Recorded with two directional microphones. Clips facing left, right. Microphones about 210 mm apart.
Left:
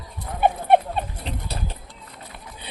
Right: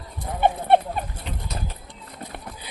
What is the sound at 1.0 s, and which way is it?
Chicken, 30° left (ahead or behind).